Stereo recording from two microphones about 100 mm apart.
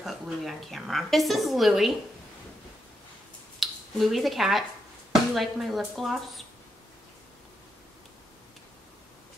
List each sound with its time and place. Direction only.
0.0 s speech: centre (ahead or behind)
3.5 s speech: centre (ahead or behind)